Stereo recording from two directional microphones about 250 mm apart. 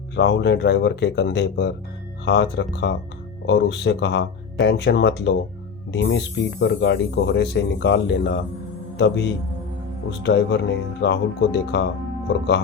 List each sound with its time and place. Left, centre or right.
0.2 s speech: left